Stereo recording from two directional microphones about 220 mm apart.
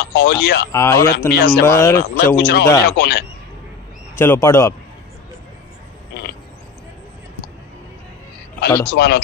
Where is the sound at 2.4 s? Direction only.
45° left (ahead or behind).